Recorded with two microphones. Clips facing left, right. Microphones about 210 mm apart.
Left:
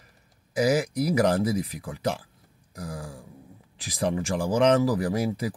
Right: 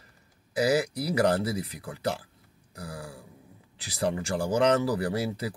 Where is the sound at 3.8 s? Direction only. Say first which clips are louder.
Left 2 dB; 15° left (ahead or behind).